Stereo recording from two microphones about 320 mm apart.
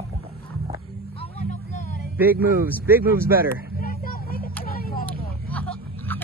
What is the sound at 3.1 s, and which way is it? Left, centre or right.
Vehicle, left.